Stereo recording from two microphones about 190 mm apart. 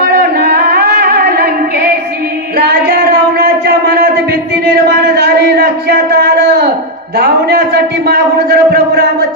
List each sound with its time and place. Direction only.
0.2 s music: 55° right (ahead or behind)
2.6 s a sound: 55° right (ahead or behind)
7.2 s a man's voice: 60° right (ahead or behind)